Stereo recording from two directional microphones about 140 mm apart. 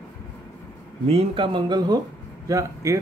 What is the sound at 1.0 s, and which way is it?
Speech, 45° right (ahead or behind).